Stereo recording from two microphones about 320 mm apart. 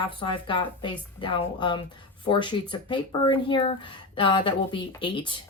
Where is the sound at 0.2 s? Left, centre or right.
Centre.